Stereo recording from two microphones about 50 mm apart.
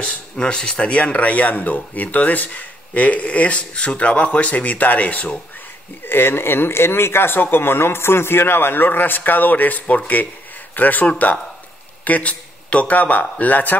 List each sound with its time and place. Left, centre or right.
0.0 s speech: left
6.0 s a man's voice: left